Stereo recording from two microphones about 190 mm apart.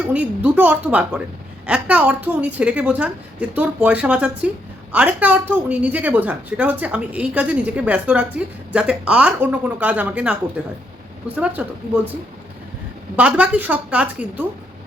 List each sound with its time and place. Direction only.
0.1 s a woman's voice: 10° right (ahead or behind)
11.3 s a woman's voice: 10° right (ahead or behind)
13.1 s a woman's voice: 5° right (ahead or behind)